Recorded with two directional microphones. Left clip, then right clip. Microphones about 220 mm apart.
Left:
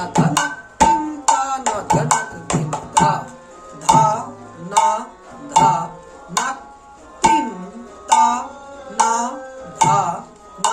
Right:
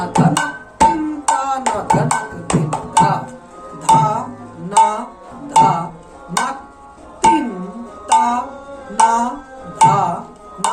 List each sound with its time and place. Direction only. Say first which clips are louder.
0.0 s music: right 2 dB; centre (ahead or behind)
4.8 s speech: right 3 dB; 5° right (ahead or behind)
5.5 s music: right 2 dB; centre (ahead or behind)
7.2 s music: right 2 dB; centre (ahead or behind)